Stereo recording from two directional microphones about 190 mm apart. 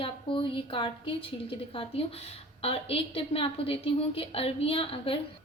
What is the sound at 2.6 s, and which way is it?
A woman's voice, 30° left (ahead or behind).